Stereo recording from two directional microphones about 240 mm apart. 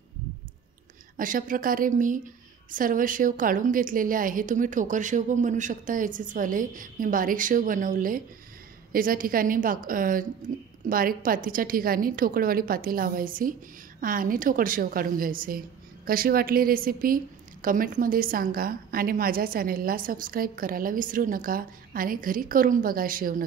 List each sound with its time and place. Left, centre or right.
1.1 s a woman's voice: right